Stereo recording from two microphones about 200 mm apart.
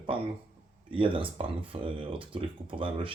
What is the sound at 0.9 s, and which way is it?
Speech, 25° right (ahead or behind).